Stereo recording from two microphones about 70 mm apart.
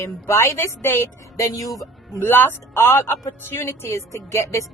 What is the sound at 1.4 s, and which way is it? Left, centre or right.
Speech, left.